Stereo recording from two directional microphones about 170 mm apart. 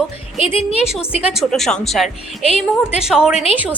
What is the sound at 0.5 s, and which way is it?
Speech, 35° left (ahead or behind).